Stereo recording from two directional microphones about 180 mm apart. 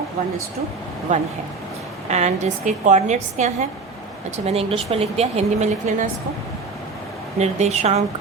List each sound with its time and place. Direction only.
1.1 s a woman's voice: 45° right (ahead or behind)
7.3 s a woman's voice: 40° right (ahead or behind)